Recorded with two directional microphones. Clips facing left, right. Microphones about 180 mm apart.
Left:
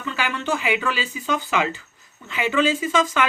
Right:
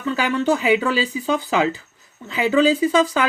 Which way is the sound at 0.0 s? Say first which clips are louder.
Right 7 dB; 35° right (ahead or behind).